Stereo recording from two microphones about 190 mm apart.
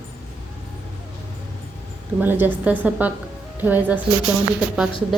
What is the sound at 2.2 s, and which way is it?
A woman's voice, 10° right (ahead or behind).